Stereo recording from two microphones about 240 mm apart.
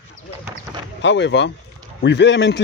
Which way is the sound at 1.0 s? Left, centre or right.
Left.